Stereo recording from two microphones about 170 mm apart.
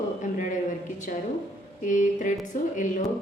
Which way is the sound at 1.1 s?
50° left (ahead or behind).